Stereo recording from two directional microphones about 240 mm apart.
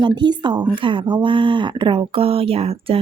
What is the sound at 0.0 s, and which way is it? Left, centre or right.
Speech, centre.